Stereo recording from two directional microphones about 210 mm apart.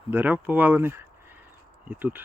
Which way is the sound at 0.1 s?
10° right (ahead or behind).